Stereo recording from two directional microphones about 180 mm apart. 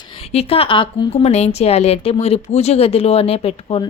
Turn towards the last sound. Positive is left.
turn(degrees=30)  # may be behind; listen again after turning